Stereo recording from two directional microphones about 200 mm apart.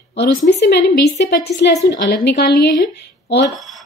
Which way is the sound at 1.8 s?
60° left (ahead or behind).